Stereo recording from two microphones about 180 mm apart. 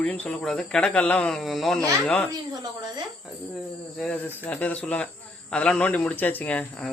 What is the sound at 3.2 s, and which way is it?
Cricket, centre (ahead or behind).